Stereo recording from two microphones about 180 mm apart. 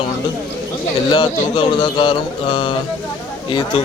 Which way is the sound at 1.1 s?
30° left (ahead or behind).